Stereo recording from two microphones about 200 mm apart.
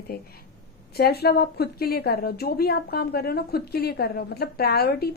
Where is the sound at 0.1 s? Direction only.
50° left (ahead or behind).